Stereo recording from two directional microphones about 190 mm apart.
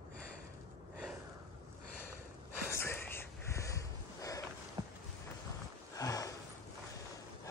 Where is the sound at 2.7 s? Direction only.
15° left (ahead or behind).